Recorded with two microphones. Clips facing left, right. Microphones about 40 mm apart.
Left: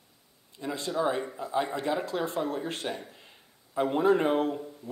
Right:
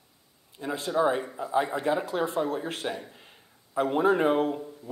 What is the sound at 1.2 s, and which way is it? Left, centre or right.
Speech, centre.